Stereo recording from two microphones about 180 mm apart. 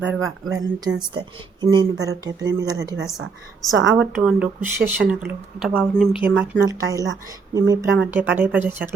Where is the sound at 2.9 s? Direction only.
90° right.